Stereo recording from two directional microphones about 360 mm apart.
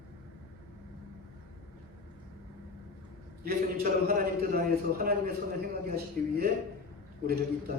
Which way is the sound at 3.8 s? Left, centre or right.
Right.